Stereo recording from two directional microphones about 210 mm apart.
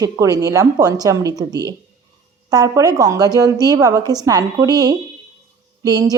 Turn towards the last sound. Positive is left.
turn(degrees=-15)  # may be behind; listen again after turning